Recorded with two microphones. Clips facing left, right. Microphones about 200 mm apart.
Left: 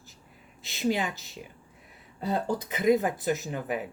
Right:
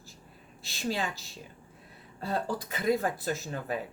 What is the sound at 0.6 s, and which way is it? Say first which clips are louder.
A woman's voice: left 5 dB; 20° left (ahead or behind).